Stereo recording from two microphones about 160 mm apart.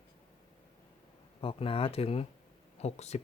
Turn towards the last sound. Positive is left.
turn(degrees=45)  # may be behind; listen again after turning